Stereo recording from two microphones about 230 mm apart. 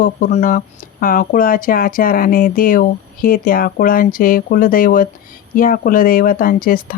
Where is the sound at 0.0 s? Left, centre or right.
Left.